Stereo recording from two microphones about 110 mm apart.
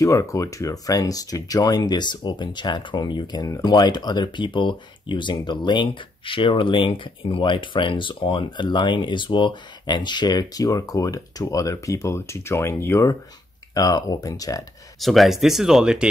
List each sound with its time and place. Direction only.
0.0 s speech: 30° left (ahead or behind)
15.0 s speech: centre (ahead or behind)